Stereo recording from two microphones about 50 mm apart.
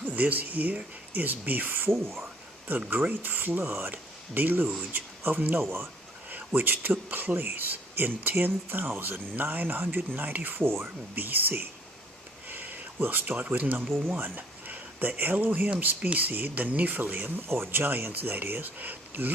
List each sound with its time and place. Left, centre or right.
0.0 s speech: right
3.0 s speech: right
6.5 s speech: right
11.1 s speech: right
12.5 s a sound: right
13.0 s speech: right